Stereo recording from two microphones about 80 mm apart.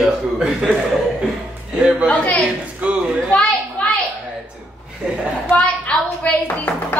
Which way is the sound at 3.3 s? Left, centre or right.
Centre.